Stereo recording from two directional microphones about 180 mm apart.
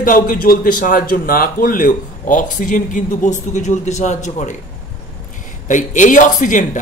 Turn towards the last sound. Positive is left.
turn(degrees=45)  # may be behind; listen again after turning